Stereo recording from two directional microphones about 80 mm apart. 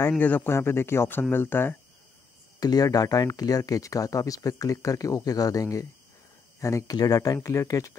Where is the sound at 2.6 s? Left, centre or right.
Left.